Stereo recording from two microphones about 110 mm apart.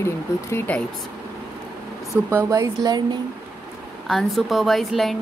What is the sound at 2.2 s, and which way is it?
Speech, 25° right (ahead or behind).